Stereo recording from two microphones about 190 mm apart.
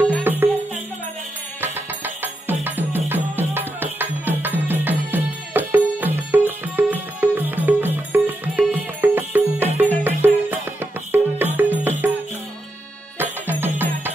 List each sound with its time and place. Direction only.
0.2 s music: 10° right (ahead or behind)
1.6 s music: 10° right (ahead or behind)
13.2 s music: 10° right (ahead or behind)